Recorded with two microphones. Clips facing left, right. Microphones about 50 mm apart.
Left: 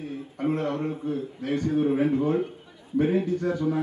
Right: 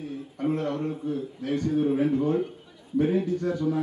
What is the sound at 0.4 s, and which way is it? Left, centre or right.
A man's voice, centre.